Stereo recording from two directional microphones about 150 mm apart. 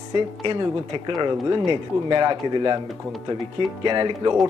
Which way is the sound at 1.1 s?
30° right (ahead or behind).